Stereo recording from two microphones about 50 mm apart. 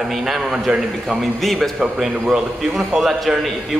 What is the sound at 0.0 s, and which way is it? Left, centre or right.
A man's voice, centre.